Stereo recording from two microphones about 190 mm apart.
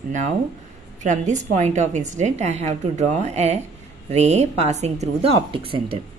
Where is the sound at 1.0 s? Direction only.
40° right (ahead or behind).